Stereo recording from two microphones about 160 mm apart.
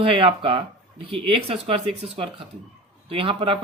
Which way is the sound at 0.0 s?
35° right (ahead or behind).